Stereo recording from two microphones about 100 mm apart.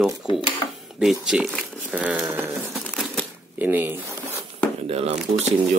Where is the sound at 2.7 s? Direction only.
Centre (ahead or behind).